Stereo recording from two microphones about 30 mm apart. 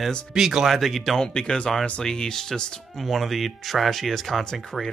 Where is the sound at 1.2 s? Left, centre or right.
Left.